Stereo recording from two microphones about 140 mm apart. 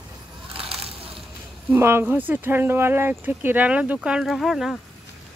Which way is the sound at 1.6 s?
15° right (ahead or behind).